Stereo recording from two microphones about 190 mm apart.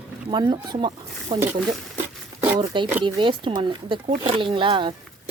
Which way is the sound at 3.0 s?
25° right (ahead or behind).